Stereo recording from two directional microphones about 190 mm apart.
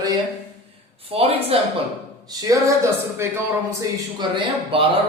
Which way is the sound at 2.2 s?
15° right (ahead or behind).